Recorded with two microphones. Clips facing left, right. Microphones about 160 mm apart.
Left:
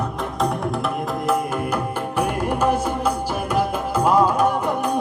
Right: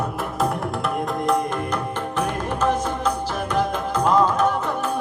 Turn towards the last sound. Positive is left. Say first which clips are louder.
# left 2 dB
turn(degrees=15)  # may be behind; listen again after turning